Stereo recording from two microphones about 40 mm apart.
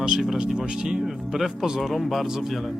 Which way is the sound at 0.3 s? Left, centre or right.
Centre.